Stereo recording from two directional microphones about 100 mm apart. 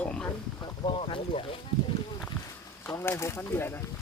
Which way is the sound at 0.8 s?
60° left (ahead or behind).